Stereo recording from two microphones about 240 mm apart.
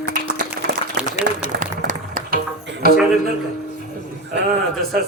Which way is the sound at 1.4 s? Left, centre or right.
Right.